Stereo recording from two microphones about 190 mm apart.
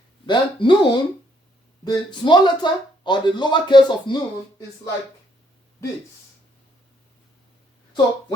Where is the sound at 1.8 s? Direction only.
25° left (ahead or behind).